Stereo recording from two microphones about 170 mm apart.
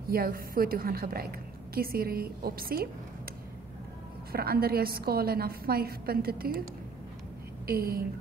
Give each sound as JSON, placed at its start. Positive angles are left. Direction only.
{"t": 0.1, "sound": "a woman's voice", "side_deg": -60}
{"t": 4.3, "sound": "a woman's voice", "side_deg": -60}
{"t": 7.6, "sound": "a woman's voice", "side_deg": -60}